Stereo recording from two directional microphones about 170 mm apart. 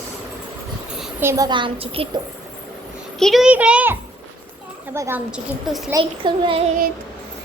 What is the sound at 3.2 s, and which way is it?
Speech, centre (ahead or behind).